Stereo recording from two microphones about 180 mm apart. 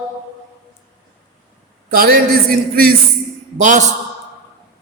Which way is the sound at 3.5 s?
45° right (ahead or behind).